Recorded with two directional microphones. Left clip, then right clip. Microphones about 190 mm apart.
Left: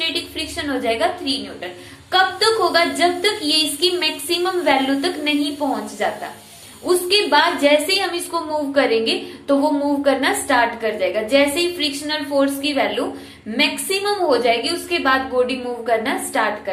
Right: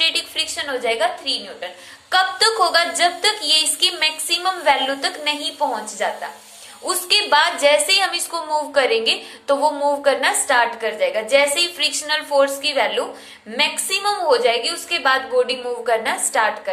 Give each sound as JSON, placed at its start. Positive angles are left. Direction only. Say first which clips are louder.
{"t": 0.0, "sound": "a woman's voice", "louder": "right 4 dB", "side_deg": -30}
{"t": 2.0, "sound": "a woman's voice", "louder": "left 1 dB", "side_deg": -25}